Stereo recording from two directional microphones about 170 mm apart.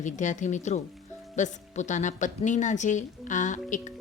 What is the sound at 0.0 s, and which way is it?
Speech, 45° left (ahead or behind).